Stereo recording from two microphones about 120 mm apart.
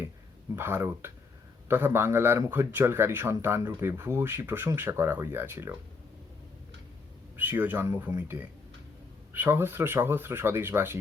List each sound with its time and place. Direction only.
0.5 s speech: 20° right (ahead or behind)
7.3 s speech: 15° right (ahead or behind)